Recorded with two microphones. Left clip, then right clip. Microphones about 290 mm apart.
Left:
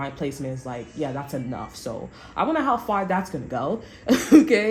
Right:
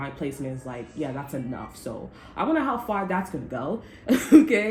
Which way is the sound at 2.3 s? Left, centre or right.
Left.